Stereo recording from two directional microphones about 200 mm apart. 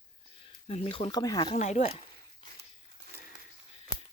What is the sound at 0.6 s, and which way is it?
Speech, 30° left (ahead or behind).